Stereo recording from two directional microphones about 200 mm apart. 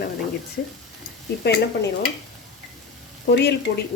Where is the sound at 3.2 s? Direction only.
55° left (ahead or behind).